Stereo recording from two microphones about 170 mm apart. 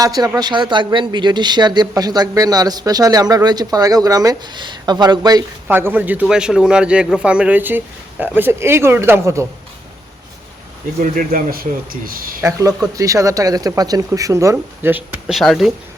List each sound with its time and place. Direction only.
0.0 s speech: 20° right (ahead or behind)
5.6 s a man's voice: 10° right (ahead or behind)
11.0 s a man's voice: 55° right (ahead or behind)
12.4 s speech: 20° right (ahead or behind); by 15.7 s centre (ahead or behind)